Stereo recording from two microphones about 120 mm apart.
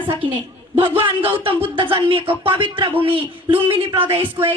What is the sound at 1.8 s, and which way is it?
Speech, 45° right (ahead or behind).